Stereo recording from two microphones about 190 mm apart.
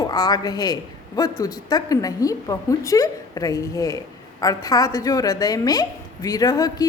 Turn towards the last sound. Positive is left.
turn(degrees=20)  # may be behind; listen again after turning